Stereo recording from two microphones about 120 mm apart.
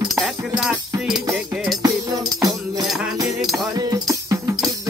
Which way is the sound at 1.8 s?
30° right (ahead or behind).